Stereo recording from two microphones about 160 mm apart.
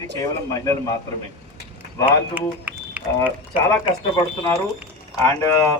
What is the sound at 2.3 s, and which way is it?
Speech, 10° right (ahead or behind).